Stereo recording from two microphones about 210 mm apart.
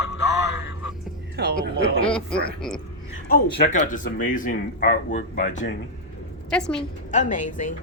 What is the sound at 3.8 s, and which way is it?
Speech, 40° left (ahead or behind).